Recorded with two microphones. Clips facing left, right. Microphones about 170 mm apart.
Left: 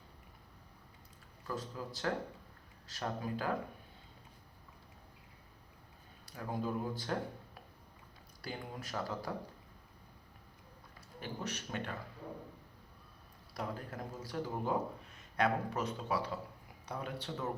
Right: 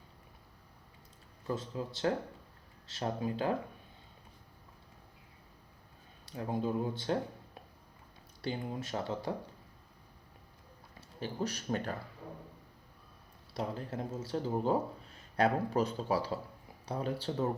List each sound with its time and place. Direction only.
1.5 s speech: 20° right (ahead or behind)
6.2 s speech: 25° right (ahead or behind)
8.4 s speech: 25° right (ahead or behind)
11.2 s speech: 35° right (ahead or behind)
13.5 s speech: 25° right (ahead or behind)